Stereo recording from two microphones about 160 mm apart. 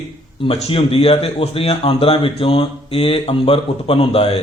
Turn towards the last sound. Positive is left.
turn(degrees=35)  # may be behind; listen again after turning